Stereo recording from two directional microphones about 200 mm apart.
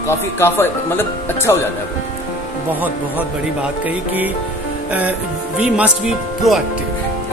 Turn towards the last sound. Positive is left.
turn(degrees=0)  # may be behind; listen again after turning